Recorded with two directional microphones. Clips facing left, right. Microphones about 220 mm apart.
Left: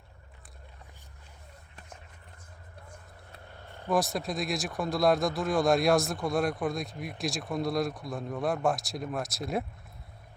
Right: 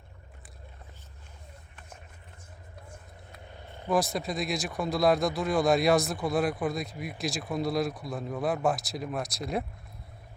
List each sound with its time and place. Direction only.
3.6 s vehicle: 15° right (ahead or behind)
3.8 s speech: centre (ahead or behind)